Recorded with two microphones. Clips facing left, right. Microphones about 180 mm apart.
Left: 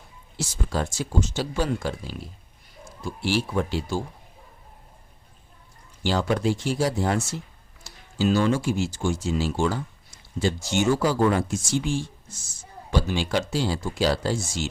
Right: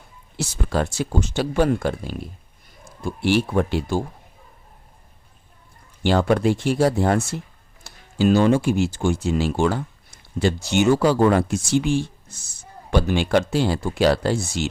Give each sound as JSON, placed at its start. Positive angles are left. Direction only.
{"t": 0.3, "sound": "speech", "side_deg": -65}
{"t": 6.0, "sound": "speech", "side_deg": -60}